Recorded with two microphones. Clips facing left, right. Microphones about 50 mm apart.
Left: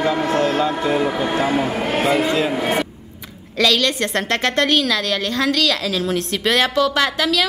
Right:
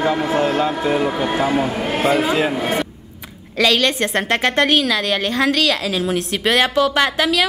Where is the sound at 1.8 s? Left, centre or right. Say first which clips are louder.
Left 1 dB; left.